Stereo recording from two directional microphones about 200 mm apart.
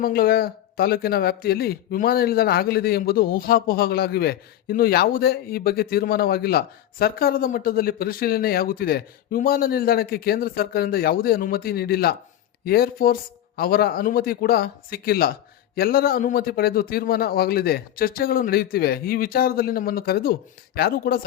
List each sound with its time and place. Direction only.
0.0 s speech: 50° left (ahead or behind)